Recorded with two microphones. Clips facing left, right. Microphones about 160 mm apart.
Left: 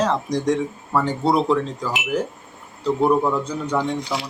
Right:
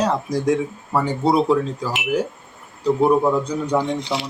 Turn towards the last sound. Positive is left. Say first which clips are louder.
# right 2 dB
turn(degrees=-25)  # may be behind; listen again after turning